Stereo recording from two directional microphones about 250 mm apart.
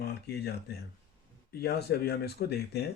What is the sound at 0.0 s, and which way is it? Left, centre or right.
Speech, left.